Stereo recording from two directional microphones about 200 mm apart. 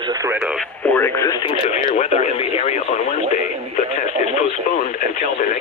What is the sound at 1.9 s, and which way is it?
Speech, 30° left (ahead or behind).